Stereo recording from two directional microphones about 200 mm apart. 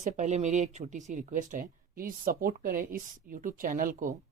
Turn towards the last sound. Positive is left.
turn(degrees=-45)  # may be behind; listen again after turning